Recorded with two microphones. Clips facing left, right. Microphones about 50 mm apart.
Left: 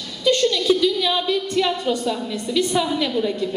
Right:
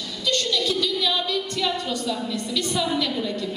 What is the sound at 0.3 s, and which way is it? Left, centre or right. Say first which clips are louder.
A woman's voice: left 7 dB; centre.